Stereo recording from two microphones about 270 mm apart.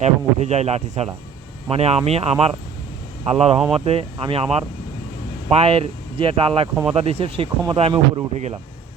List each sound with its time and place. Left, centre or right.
0.0 s speech: right
5.5 s speech: right